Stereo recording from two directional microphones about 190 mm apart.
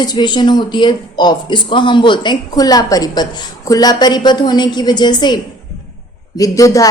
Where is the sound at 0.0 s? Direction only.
25° left (ahead or behind).